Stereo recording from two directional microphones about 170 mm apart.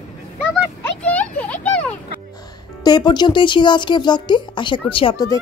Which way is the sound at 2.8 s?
25° left (ahead or behind).